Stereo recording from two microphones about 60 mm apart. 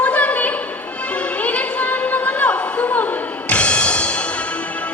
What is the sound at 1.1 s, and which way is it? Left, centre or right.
Music, left.